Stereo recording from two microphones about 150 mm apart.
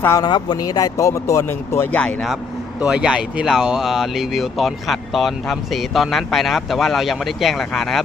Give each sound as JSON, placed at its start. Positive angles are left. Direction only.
{"t": 0.2, "sound": "speech", "side_deg": 30}